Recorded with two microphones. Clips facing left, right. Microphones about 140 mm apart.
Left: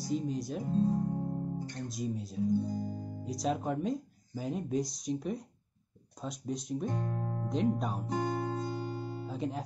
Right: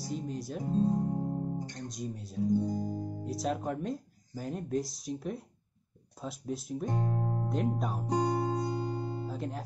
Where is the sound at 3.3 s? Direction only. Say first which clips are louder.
Left 1 dB; centre (ahead or behind).